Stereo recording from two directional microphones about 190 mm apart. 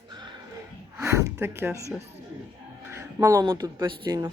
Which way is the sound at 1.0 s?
15° right (ahead or behind).